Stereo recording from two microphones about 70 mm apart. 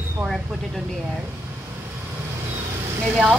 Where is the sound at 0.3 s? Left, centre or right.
Centre.